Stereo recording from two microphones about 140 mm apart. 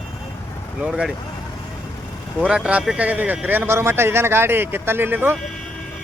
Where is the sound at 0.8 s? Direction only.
5° right (ahead or behind).